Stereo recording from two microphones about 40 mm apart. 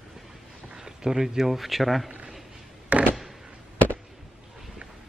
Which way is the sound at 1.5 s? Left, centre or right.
Centre.